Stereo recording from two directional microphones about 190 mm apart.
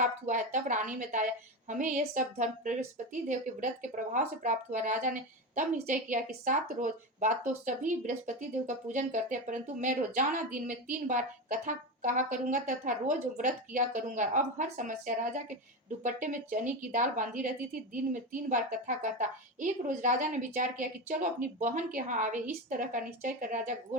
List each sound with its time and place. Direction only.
0.0 s a woman's voice: 45° right (ahead or behind)